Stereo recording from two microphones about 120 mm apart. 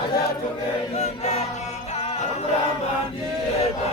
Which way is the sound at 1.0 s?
65° left (ahead or behind).